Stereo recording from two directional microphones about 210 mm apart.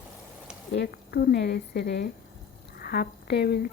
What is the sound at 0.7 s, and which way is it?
Speech, 50° left (ahead or behind).